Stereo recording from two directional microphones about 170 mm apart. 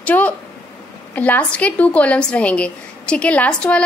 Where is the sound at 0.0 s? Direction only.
10° left (ahead or behind).